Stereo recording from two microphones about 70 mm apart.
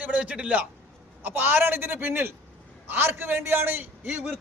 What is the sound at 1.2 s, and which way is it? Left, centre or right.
A man's voice, right.